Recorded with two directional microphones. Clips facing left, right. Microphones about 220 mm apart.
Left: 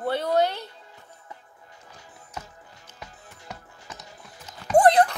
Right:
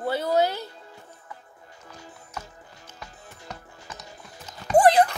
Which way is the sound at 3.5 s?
10° left (ahead or behind).